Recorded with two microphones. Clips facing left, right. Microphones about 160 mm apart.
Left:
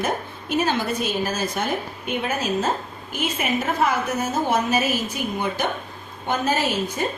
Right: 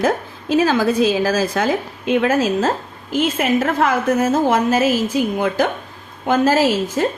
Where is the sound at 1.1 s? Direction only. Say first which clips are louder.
Right 7 dB; 90° right.